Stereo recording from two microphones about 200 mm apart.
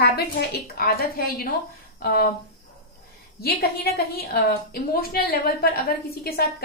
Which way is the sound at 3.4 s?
50° left (ahead or behind).